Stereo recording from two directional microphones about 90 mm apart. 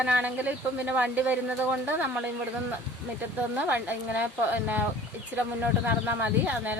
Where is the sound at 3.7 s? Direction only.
20° right (ahead or behind).